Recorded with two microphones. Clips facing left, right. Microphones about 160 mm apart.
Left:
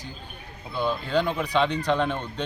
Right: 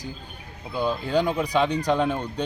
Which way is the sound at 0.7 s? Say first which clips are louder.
Right 1 dB; 15° right (ahead or behind).